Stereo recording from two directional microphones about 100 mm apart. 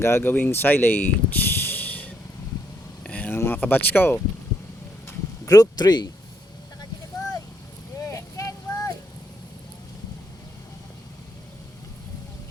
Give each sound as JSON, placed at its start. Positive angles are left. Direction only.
{"t": 0.0, "sound": "speech", "side_deg": 25}
{"t": 3.0, "sound": "a sound", "side_deg": 15}
{"t": 5.5, "sound": "speech", "side_deg": 40}
{"t": 8.0, "sound": "vehicle", "side_deg": 30}